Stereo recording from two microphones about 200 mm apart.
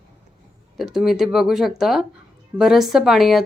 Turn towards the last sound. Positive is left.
turn(degrees=0)  # may be behind; listen again after turning